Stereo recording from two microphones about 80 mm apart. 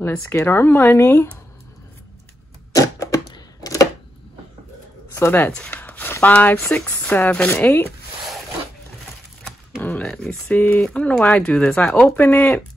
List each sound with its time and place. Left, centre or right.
0.0 s speech: left
2.7 s typewriter: left
5.1 s speech: left
5.7 s chopping: left
6.2 s speech: centre
9.8 s a sound: left
10.0 s a sound: centre
10.5 s speech: centre